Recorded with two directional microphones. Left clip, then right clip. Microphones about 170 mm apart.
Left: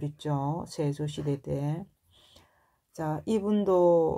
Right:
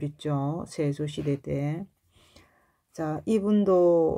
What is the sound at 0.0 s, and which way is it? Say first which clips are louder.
Speech: right 2 dB; 25° right (ahead or behind).